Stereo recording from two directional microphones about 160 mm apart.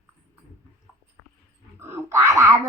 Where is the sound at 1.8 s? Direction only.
15° right (ahead or behind).